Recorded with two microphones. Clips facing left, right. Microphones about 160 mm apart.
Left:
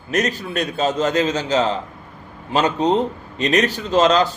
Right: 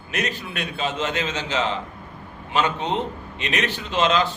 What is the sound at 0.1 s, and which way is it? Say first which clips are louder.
A man's voice: left 7 dB; 40° left (ahead or behind).